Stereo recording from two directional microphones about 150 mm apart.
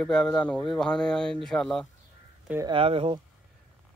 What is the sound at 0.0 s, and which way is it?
Speech, 5° left (ahead or behind).